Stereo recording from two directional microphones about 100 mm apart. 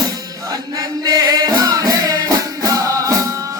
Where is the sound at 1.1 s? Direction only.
40° right (ahead or behind).